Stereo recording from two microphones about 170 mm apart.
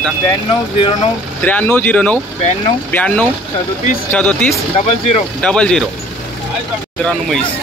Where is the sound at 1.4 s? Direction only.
10° left (ahead or behind).